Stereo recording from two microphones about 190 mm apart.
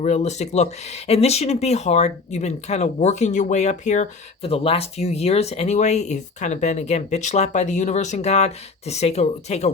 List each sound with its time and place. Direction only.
0.0 s speech: 35° left (ahead or behind)